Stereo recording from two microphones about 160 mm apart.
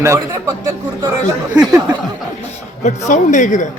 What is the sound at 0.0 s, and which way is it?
Speech, 20° right (ahead or behind).